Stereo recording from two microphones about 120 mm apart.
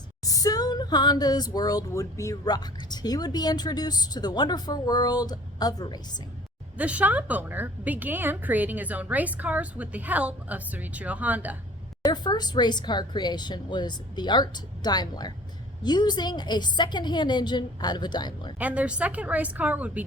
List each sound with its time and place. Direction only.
0.3 s speech: 30° left (ahead or behind)
6.7 s a woman's voice: 10° right (ahead or behind)
12.0 s speech: 35° left (ahead or behind)
18.6 s a woman's voice: 10° right (ahead or behind)